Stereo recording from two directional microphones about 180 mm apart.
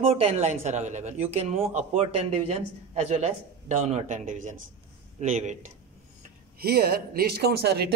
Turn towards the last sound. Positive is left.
turn(degrees=-65)  # may be behind; listen again after turning